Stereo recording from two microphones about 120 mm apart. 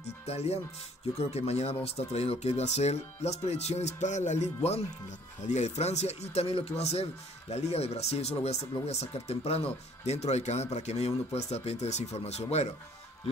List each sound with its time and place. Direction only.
0.0 s speech: 65° left (ahead or behind)
5.4 s speech: 75° left (ahead or behind)